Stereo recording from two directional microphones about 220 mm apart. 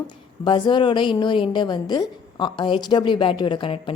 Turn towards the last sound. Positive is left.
turn(degrees=25)  # may be behind; listen again after turning